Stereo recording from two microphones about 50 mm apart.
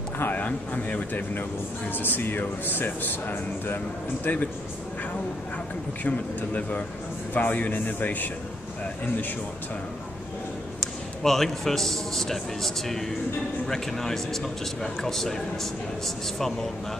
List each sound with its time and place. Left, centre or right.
0.2 s a sound: left
0.5 s speech: left
1.9 s speech: left
6.0 s speech: left
10.8 s a man's voice: centre